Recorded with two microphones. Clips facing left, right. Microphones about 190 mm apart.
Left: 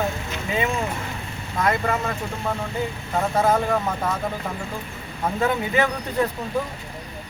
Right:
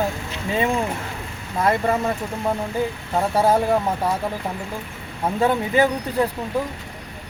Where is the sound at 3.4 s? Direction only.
30° right (ahead or behind).